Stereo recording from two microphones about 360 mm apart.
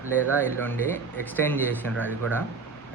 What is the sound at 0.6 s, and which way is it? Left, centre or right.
Speech, centre.